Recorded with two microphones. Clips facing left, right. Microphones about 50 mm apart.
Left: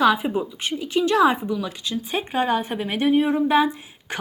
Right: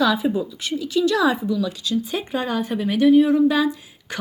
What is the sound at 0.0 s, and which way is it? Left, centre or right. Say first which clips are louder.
A woman's voice: left 1 dB; left.